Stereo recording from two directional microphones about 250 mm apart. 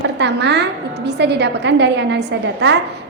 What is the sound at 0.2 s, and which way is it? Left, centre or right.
A woman's voice, right.